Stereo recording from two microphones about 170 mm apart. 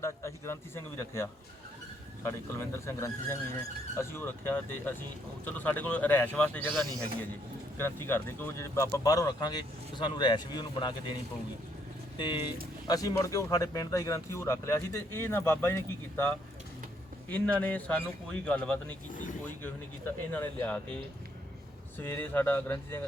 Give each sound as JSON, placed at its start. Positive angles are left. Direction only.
{"t": 0.0, "sound": "speech", "side_deg": 15}
{"t": 12.1, "sound": "speech", "side_deg": 25}
{"t": 19.1, "sound": "vehicle", "side_deg": 50}
{"t": 19.6, "sound": "speech", "side_deg": 10}
{"t": 22.0, "sound": "speech", "side_deg": 10}